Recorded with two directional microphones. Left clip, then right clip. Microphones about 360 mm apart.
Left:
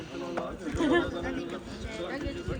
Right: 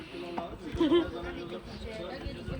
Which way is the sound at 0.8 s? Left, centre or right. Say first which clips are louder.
Even; centre.